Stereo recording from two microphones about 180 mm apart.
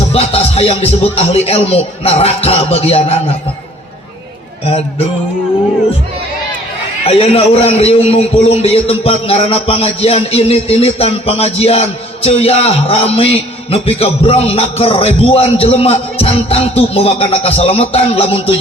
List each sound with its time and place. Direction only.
0.1 s a man's voice: 35° left (ahead or behind)
7.0 s a man's voice: 30° left (ahead or behind)